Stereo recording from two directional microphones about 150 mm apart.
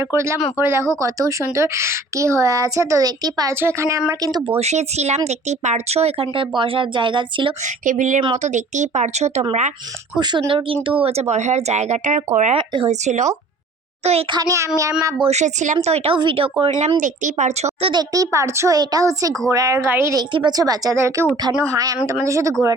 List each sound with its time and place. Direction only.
0.0 s a woman's voice: 20° right (ahead or behind)
4.6 s speech: 45° right (ahead or behind)
7.6 s speech: 55° right (ahead or behind)
10.2 s a woman's voice: 30° right (ahead or behind)
11.0 s speech: 45° right (ahead or behind)
12.5 s speech: 35° right (ahead or behind)
12.9 s a child's voice: 50° right (ahead or behind)
14.3 s a woman's voice: 25° right (ahead or behind)
15.2 s speech: 50° right (ahead or behind)
17.0 s speech: 55° right (ahead or behind)
17.9 s a woman's voice: 25° right (ahead or behind)